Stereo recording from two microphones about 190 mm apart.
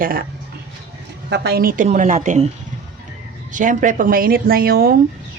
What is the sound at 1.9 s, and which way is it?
Speech, 40° right (ahead or behind).